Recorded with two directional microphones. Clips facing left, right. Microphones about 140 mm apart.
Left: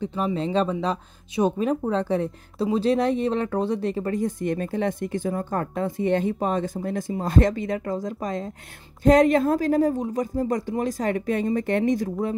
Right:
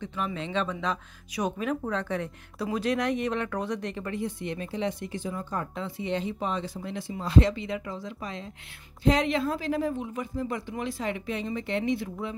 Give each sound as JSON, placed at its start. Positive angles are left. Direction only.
{"t": 0.0, "sound": "speech", "side_deg": 35}